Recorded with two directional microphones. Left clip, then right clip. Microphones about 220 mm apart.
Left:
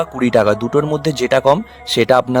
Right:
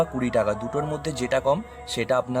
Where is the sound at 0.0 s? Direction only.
40° left (ahead or behind).